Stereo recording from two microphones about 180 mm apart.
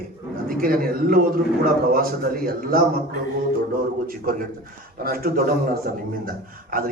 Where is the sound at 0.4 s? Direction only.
55° right (ahead or behind).